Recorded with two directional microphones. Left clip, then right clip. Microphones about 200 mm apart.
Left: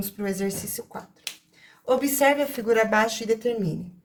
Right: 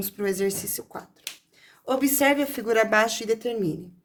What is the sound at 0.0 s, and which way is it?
Speech, 55° right (ahead or behind).